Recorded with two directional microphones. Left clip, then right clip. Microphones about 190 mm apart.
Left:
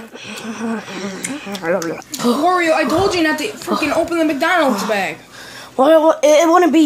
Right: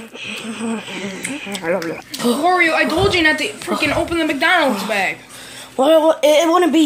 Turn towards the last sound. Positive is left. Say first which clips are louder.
# left 2 dB
turn(degrees=0)  # may be behind; listen again after turning